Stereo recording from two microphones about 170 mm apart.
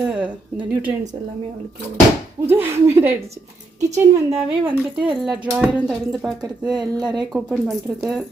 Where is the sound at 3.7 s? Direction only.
40° right (ahead or behind).